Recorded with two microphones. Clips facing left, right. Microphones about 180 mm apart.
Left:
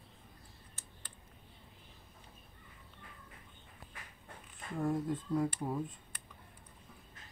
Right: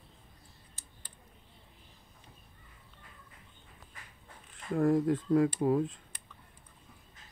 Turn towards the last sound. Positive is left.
turn(degrees=-90)